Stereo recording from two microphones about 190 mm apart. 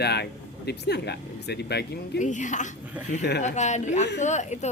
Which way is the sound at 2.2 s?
40° left (ahead or behind).